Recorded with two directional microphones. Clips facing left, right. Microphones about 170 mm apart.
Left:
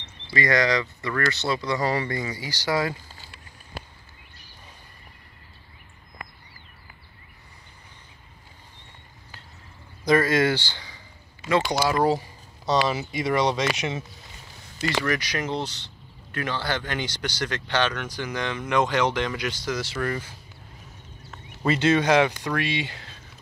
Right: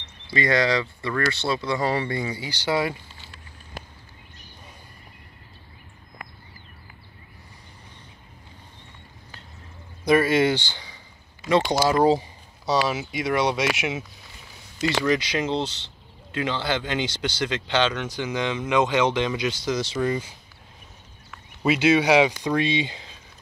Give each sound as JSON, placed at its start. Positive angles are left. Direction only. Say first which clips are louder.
{"t": 0.3, "sound": "speech", "louder": "right 1 dB", "side_deg": -25}
{"t": 10.0, "sound": "speech", "louder": "right 1 dB", "side_deg": -20}
{"t": 12.8, "sound": "speech", "louder": "even", "side_deg": -5}
{"t": 15.0, "sound": "speech", "louder": "right 4 dB", "side_deg": -25}
{"t": 21.6, "sound": "speech", "louder": "right 2 dB", "side_deg": -10}